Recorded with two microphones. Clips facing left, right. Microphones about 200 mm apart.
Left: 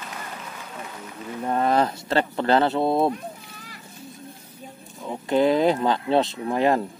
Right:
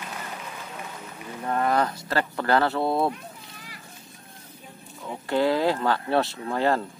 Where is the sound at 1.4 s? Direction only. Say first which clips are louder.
Left 3 dB; 25° left (ahead or behind).